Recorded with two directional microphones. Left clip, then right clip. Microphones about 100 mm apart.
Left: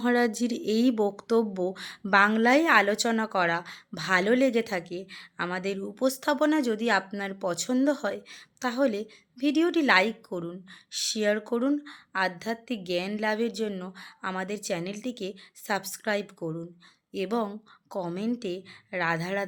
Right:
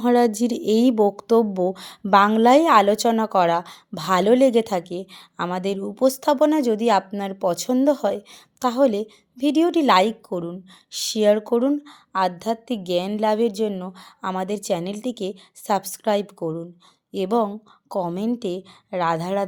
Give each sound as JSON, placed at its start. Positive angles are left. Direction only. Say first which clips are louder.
{"t": 0.0, "sound": "speech", "louder": "right 7 dB", "side_deg": -45}
{"t": 13.9, "sound": "a woman's voice", "louder": "right 6 dB", "side_deg": -45}